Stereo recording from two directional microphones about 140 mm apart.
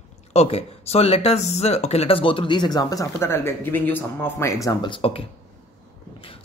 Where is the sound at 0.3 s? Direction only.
45° left (ahead or behind).